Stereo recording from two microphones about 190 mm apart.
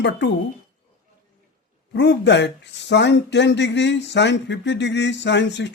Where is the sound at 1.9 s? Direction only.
65° left (ahead or behind).